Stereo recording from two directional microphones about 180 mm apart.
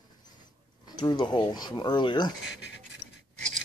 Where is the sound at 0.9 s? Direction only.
25° left (ahead or behind).